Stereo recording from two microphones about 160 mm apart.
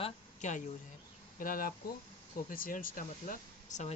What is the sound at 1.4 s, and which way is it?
Speech, 60° left (ahead or behind).